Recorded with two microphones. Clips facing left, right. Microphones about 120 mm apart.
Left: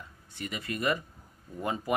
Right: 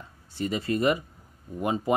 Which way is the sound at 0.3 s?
30° right (ahead or behind).